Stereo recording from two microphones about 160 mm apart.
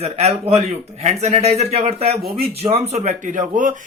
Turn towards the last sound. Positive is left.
turn(degrees=-55)  # may be behind; listen again after turning